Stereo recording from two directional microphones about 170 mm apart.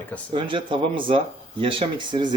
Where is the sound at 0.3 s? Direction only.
30° right (ahead or behind).